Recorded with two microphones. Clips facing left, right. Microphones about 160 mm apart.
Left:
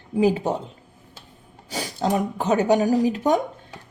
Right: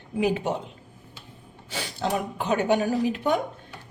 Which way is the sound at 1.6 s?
40° left (ahead or behind).